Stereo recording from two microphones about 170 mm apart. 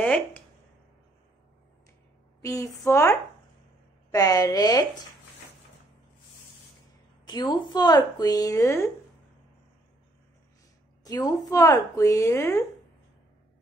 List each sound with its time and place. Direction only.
0.0 s a woman's voice: 10° left (ahead or behind)
2.4 s a woman's voice: 15° left (ahead or behind)
7.2 s speech: 25° left (ahead or behind)
11.1 s speech: 20° left (ahead or behind)